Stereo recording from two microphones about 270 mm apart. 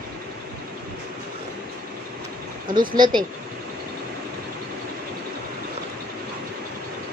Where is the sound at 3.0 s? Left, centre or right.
Centre.